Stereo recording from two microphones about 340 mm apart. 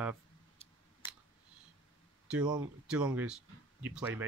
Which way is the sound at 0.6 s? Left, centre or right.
Centre.